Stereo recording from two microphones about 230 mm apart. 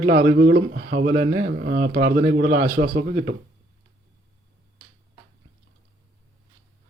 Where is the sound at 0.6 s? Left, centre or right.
Right.